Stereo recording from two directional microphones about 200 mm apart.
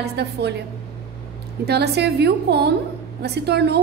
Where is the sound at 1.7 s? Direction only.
55° right (ahead or behind).